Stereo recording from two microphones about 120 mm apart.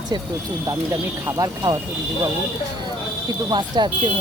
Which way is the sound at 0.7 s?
30° right (ahead or behind).